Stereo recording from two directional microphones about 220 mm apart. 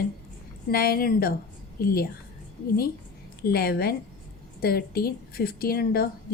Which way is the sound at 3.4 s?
45° left (ahead or behind).